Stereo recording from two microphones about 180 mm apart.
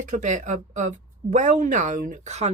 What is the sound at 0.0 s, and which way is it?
Speech, 40° right (ahead or behind).